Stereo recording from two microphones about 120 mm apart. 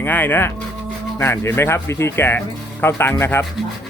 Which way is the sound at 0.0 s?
15° left (ahead or behind).